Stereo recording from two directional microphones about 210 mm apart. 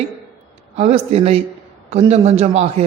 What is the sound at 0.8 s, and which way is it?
A man's voice, 30° right (ahead or behind).